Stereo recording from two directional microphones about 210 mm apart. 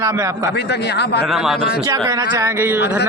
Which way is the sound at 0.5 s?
50° left (ahead or behind).